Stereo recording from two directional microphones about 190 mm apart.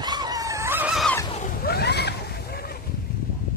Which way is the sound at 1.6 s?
55° left (ahead or behind).